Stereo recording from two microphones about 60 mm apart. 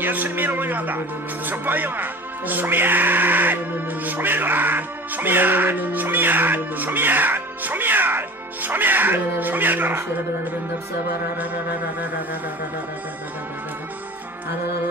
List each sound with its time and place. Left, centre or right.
0.0 s music: right